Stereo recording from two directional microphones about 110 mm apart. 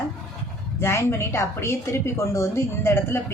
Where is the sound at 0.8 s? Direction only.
25° left (ahead or behind).